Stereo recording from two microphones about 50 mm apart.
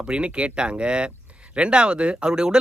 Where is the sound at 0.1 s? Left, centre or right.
Right.